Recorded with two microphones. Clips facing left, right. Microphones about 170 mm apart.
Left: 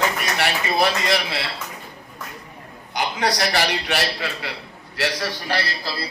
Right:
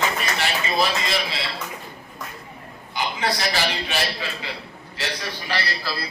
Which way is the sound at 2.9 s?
75° left (ahead or behind).